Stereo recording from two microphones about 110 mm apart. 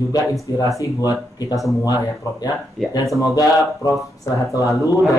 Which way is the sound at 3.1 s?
30° left (ahead or behind).